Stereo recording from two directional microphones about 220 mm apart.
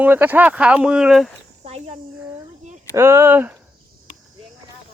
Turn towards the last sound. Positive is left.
turn(degrees=-10)  # may be behind; listen again after turning